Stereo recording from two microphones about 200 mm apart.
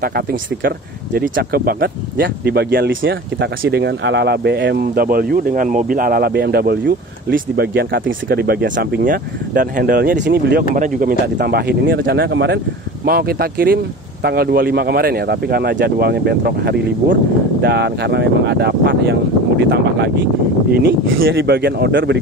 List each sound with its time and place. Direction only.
0.0 s speech: 50° right (ahead or behind)
9.0 s speech: 45° right (ahead or behind)
10.8 s speech: 45° right (ahead or behind); by 12.5 s 60° right (ahead or behind)
13.0 s speech: 50° right (ahead or behind)
20.7 s speech: 50° right (ahead or behind)